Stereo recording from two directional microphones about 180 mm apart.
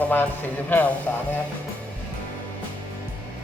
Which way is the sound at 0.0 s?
10° left (ahead or behind).